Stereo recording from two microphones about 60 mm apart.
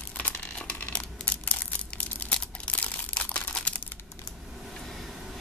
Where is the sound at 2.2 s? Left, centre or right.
Left.